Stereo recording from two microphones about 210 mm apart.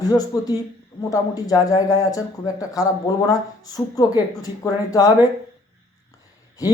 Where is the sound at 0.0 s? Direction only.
15° left (ahead or behind).